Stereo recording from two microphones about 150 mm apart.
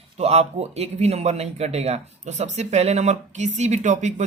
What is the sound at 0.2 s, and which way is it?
Speech, 45° right (ahead or behind).